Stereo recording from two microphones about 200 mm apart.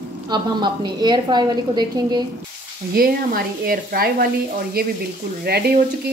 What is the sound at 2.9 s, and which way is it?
Speech, 45° right (ahead or behind).